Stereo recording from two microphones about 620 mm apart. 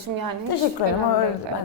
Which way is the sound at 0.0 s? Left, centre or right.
Right.